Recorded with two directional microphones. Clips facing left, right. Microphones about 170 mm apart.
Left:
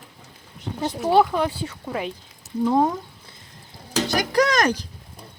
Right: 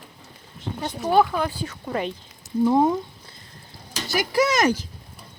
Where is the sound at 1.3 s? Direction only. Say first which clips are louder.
Left 2 dB; 25° left (ahead or behind).